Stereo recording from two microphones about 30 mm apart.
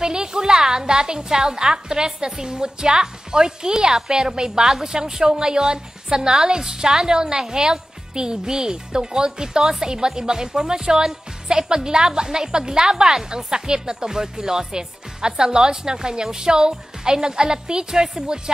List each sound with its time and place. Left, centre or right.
0.0 s a woman's voice: right